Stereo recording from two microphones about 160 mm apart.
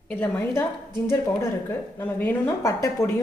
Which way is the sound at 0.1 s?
15° left (ahead or behind).